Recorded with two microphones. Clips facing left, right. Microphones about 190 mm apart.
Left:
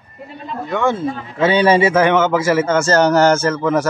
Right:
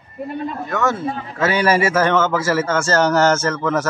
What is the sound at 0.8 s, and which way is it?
A man's voice, 25° left (ahead or behind).